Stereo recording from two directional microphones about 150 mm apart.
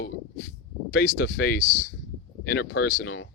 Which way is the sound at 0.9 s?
90° left.